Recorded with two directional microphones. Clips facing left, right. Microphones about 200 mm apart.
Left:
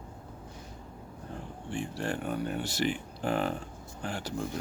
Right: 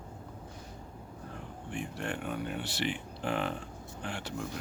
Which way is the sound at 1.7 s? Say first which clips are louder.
Left 3 dB; 30° left (ahead or behind).